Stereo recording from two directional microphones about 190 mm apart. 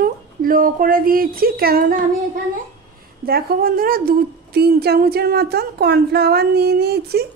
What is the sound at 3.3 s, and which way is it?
A woman's voice, 55° right (ahead or behind).